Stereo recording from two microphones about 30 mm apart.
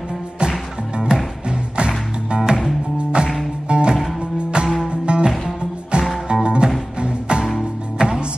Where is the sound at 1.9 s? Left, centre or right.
Centre.